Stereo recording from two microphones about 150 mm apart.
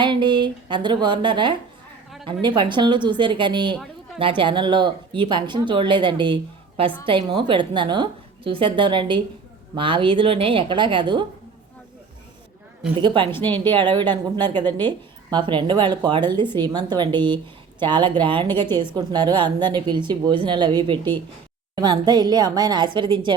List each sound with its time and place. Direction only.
0.0 s speech: 30° right (ahead or behind)
13.0 s a woman's voice: 30° right (ahead or behind)